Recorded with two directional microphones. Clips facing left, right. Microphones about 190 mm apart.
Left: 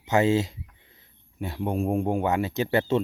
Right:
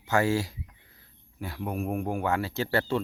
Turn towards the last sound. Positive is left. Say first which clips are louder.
# left 4 dB
turn(degrees=20)  # may be behind; listen again after turning